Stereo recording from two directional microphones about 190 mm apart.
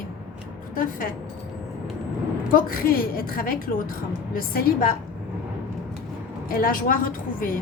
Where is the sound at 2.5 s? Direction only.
50° left (ahead or behind).